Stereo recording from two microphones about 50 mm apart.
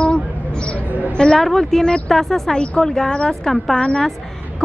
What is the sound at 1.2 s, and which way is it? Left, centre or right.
Speech, centre.